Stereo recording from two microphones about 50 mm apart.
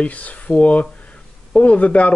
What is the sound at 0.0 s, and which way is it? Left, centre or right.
Speech, left.